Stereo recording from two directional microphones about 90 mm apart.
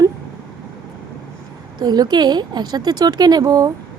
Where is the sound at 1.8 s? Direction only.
50° right (ahead or behind).